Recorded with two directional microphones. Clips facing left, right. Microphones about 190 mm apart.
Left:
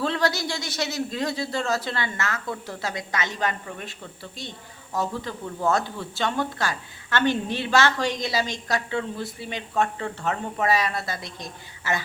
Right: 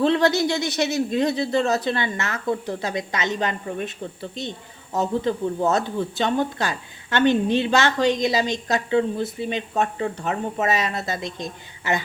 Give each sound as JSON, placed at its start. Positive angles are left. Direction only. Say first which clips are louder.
{"t": 0.0, "sound": "speech", "louder": "right 6 dB", "side_deg": -20}